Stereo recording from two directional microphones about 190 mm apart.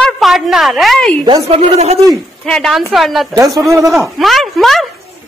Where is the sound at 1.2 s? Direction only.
30° right (ahead or behind).